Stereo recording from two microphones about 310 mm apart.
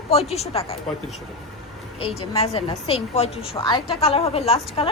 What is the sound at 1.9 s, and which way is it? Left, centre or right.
A woman's voice, centre.